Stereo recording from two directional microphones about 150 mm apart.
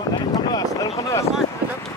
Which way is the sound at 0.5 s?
25° left (ahead or behind).